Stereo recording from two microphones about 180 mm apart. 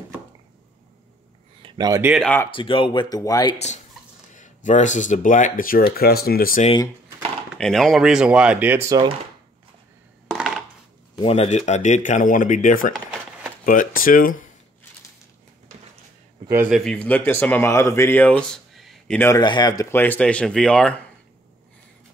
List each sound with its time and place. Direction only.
1.6 s a sound: 25° right (ahead or behind)
2.0 s speech: 10° right (ahead or behind)
2.2 s speech: 10° left (ahead or behind)
2.5 s speech: 30° left (ahead or behind)
3.5 s speech: 40° left (ahead or behind); by 6.6 s 55° left (ahead or behind)
7.5 s speech: centre (ahead or behind); by 9.1 s 20° right (ahead or behind)
10.3 s a sound: centre (ahead or behind)
11.2 s speech: 35° left (ahead or behind)
16.4 s a man's voice: 10° right (ahead or behind)
16.7 s speech: 5° left (ahead or behind)
19.1 s speech: 15° left (ahead or behind)
19.4 s speech: 25° left (ahead or behind); by 21.0 s 5° left (ahead or behind)